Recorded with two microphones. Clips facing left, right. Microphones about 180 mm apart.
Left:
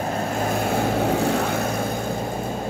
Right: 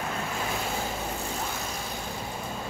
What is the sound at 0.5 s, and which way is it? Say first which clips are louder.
Vehicle: left 10 dB; 60° left (ahead or behind).